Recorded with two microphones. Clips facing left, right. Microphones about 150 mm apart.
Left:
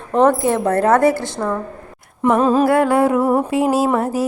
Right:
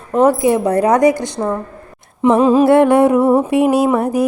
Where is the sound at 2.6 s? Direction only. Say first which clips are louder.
Right 4 dB; 25° right (ahead or behind).